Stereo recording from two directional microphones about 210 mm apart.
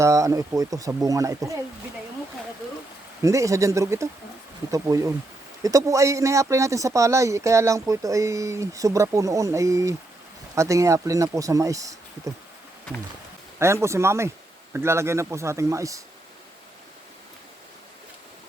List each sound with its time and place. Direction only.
0.0 s speech: 15° right (ahead or behind)
3.2 s speech: 15° right (ahead or behind)
13.6 s speech: 15° right (ahead or behind)